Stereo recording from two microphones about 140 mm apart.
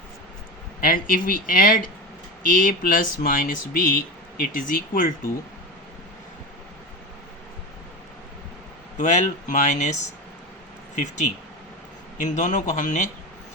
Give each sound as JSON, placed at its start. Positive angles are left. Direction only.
{"t": 0.8, "sound": "speech", "side_deg": 80}
{"t": 9.0, "sound": "speech", "side_deg": 60}